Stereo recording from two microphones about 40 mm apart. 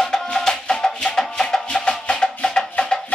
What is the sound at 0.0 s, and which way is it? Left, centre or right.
Music, centre.